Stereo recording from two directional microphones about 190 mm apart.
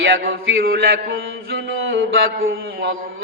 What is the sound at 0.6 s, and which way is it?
Mantra, 50° right (ahead or behind).